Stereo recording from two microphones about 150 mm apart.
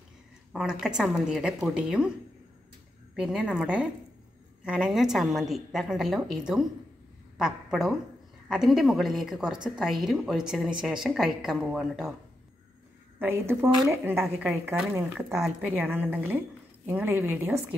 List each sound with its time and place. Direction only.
0.5 s a woman's voice: 5° right (ahead or behind)
3.2 s a woman's voice: 5° right (ahead or behind)
13.2 s a woman's voice: 15° right (ahead or behind)
14.7 s a woman's voice: 15° right (ahead or behind)